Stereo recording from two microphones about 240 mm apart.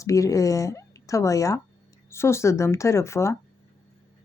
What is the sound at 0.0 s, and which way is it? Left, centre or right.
A woman's voice, centre.